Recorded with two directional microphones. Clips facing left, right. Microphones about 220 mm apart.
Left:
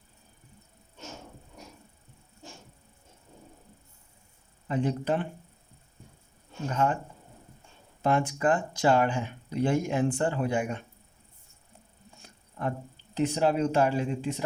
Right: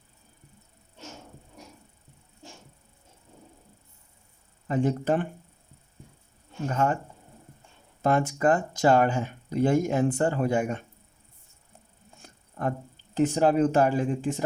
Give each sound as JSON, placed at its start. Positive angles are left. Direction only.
{"t": 4.7, "sound": "speech", "side_deg": -45}
{"t": 6.8, "sound": "speech", "side_deg": -40}
{"t": 8.0, "sound": "speech", "side_deg": -45}
{"t": 13.1, "sound": "speech", "side_deg": -45}